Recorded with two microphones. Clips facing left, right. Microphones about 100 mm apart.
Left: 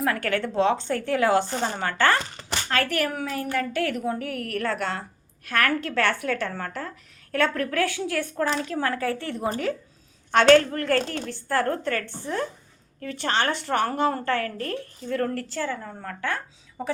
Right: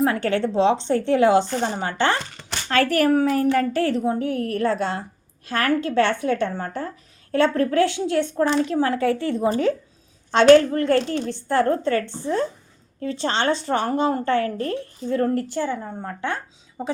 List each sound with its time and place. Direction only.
0.0 s speech: 25° right (ahead or behind)
2.6 s a woman's voice: 35° right (ahead or behind); by 16.9 s 20° right (ahead or behind)